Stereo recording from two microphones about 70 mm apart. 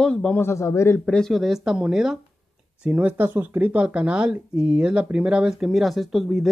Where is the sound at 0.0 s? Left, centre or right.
Centre.